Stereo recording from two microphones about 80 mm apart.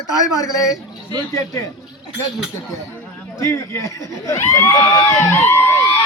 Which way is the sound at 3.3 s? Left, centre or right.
Left.